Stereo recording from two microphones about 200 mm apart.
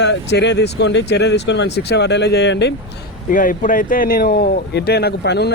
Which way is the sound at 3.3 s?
40° left (ahead or behind).